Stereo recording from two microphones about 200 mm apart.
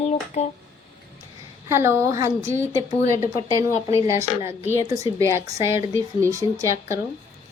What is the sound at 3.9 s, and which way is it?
Speech, 15° right (ahead or behind).